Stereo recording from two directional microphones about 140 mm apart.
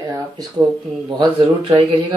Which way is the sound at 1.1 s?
35° right (ahead or behind).